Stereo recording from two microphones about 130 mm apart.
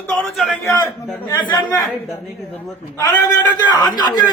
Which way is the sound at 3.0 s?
30° left (ahead or behind).